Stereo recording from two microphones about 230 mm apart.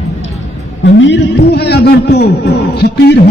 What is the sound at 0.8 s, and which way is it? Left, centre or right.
A man's voice, left.